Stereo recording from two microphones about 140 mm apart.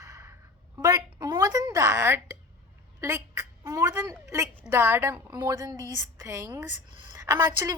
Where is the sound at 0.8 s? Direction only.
25° right (ahead or behind).